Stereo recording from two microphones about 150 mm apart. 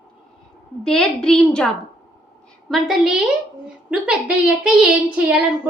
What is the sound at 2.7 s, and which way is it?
A woman's voice, centre (ahead or behind).